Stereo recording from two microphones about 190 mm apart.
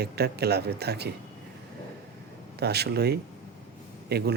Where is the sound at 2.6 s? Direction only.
60° right (ahead or behind).